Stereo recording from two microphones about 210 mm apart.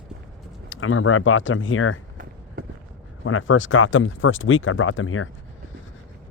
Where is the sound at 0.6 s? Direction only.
70° left (ahead or behind).